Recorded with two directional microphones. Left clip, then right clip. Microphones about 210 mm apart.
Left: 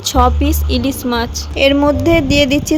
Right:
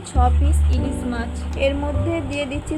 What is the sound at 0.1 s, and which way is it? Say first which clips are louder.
A woman's voice: left 9 dB; 50° left (ahead or behind).